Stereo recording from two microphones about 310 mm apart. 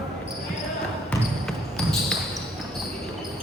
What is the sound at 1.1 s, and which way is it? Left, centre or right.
Basketball bounce, centre.